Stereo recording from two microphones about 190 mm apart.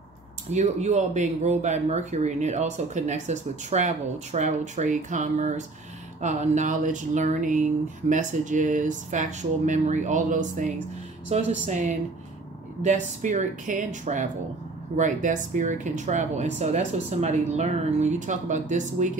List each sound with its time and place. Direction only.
0.5 s speech: 35° right (ahead or behind)